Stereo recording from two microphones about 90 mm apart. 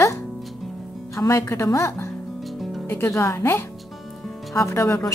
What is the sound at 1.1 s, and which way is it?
Speech, 35° left (ahead or behind).